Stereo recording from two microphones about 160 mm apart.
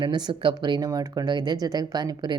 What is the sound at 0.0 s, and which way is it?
Speech, 30° right (ahead or behind).